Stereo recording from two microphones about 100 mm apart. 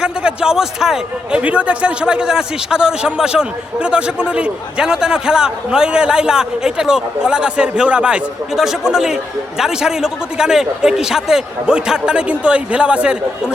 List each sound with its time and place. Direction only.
0.0 s a man's voice: 10° right (ahead or behind)